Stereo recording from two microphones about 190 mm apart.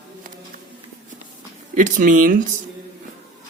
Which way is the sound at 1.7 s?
40° right (ahead or behind).